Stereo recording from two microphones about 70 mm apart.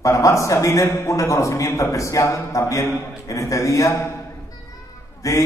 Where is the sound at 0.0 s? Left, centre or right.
Left.